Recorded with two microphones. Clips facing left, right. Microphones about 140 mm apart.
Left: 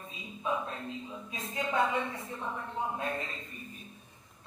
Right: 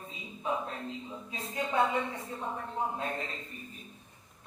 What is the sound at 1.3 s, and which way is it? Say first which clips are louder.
Speech: right 1 dB; 30° right (ahead or behind).